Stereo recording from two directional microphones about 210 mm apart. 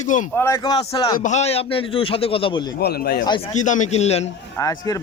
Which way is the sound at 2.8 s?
50° left (ahead or behind).